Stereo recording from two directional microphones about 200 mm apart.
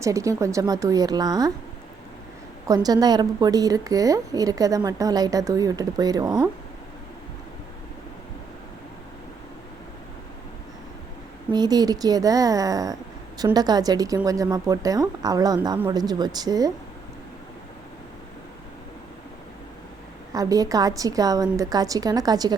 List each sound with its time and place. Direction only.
0.0 s a woman's voice: 15° right (ahead or behind)
2.6 s a woman's voice: 20° right (ahead or behind)
11.5 s a woman's voice: 20° right (ahead or behind)
20.3 s a woman's voice: 15° right (ahead or behind)